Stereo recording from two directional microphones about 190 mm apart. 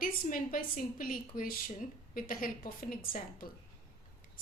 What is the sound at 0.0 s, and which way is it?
A woman's voice, 45° left (ahead or behind).